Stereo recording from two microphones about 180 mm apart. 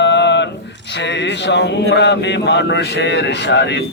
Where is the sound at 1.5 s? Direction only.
75° left (ahead or behind).